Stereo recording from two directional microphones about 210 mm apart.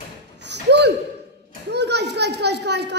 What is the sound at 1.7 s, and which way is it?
Children playing, 55° right (ahead or behind).